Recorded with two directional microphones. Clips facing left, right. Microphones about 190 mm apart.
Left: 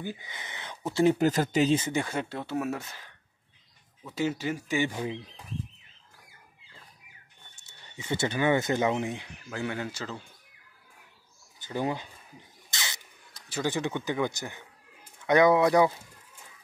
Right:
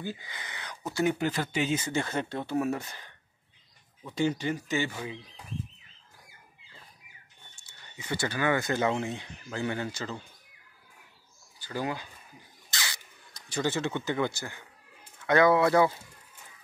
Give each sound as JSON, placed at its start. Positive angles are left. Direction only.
{"t": 0.0, "sound": "speech", "side_deg": 15}
{"t": 1.1, "sound": "speech", "side_deg": 40}
{"t": 1.8, "sound": "speech", "side_deg": 15}
{"t": 8.0, "sound": "speech", "side_deg": 20}
{"t": 11.6, "sound": "crow", "side_deg": 20}
{"t": 13.3, "sound": "speech", "side_deg": 5}